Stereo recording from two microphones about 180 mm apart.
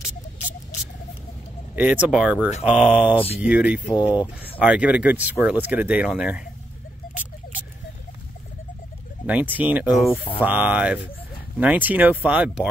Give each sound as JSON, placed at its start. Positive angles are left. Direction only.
{"t": 1.8, "sound": "speech", "side_deg": -10}
{"t": 9.2, "sound": "speech", "side_deg": -10}